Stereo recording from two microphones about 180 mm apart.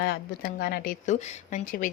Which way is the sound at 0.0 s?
60° left (ahead or behind).